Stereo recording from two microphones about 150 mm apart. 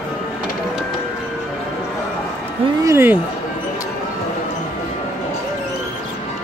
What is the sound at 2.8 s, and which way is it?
Speech, 15° right (ahead or behind).